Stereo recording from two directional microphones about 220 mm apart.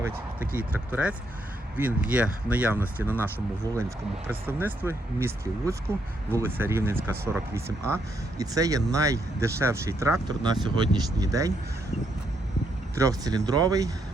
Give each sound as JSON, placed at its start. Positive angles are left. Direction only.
{"t": 0.0, "sound": "speech", "side_deg": -10}
{"t": 8.4, "sound": "speech", "side_deg": -15}
{"t": 13.0, "sound": "speech", "side_deg": -15}